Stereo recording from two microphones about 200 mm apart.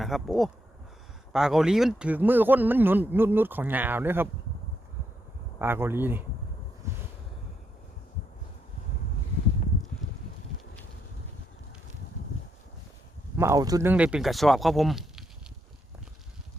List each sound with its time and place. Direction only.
0.0 s speech: centre (ahead or behind)
5.5 s speech: 10° right (ahead or behind)
6.8 s a sound: 15° right (ahead or behind)
13.3 s speech: 15° right (ahead or behind)
13.9 s speech: 5° right (ahead or behind)